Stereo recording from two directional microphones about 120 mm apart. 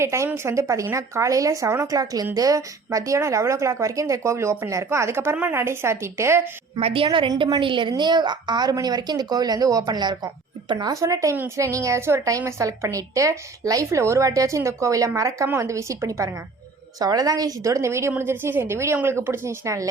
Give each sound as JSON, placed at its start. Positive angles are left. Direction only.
{"t": 0.0, "sound": "speech", "side_deg": -25}
{"t": 6.7, "sound": "a woman's voice", "side_deg": -50}
{"t": 7.3, "sound": "a woman's voice", "side_deg": -35}